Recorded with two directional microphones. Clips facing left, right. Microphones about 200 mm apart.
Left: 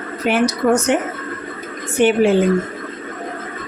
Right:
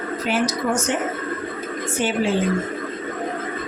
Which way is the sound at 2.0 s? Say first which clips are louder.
Left 8 dB; 65° left (ahead or behind).